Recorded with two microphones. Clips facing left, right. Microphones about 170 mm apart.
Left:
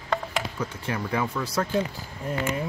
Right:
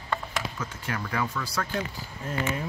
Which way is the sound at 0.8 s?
25° left (ahead or behind).